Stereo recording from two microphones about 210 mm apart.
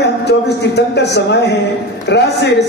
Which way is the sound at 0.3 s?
55° left (ahead or behind).